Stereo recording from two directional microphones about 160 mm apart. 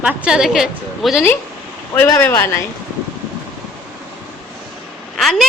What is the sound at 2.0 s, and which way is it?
Speech, 15° left (ahead or behind).